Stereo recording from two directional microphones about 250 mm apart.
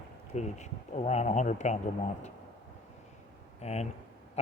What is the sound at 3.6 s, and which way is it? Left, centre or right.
Speech, left.